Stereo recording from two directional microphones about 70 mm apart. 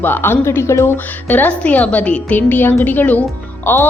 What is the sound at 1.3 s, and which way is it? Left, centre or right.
A woman's voice, left.